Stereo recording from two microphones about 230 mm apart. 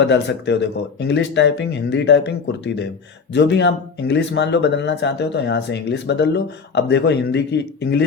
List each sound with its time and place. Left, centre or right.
0.0 s speech: left